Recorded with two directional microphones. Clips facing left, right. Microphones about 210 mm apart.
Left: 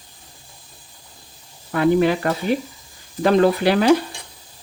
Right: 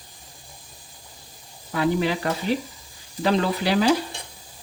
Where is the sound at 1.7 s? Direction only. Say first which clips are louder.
Left 6 dB; 55° left (ahead or behind).